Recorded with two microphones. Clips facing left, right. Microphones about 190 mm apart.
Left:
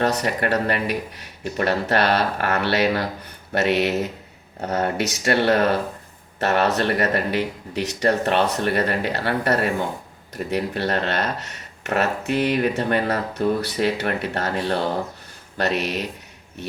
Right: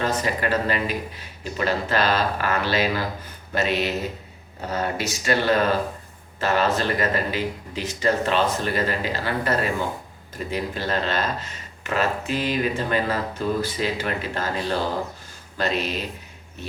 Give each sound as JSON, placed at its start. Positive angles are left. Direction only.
{"t": 0.0, "sound": "speech", "side_deg": 70}